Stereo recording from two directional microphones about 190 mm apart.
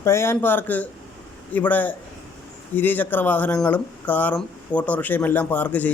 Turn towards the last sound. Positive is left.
turn(degrees=10)  # may be behind; listen again after turning